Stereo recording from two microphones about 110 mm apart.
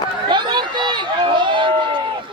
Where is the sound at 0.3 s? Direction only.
45° right (ahead or behind).